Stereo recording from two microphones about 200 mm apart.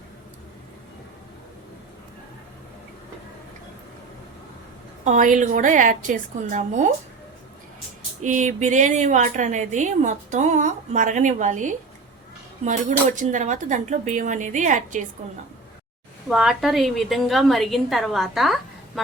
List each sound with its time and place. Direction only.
5.0 s a woman's voice: 40° right (ahead or behind)
8.2 s a woman's voice: 40° right (ahead or behind)
16.3 s a woman's voice: centre (ahead or behind)